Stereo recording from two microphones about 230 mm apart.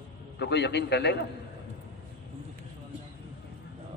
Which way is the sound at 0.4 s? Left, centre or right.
Left.